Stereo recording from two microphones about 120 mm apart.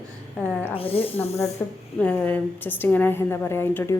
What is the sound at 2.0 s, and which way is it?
A woman's voice, 10° left (ahead or behind).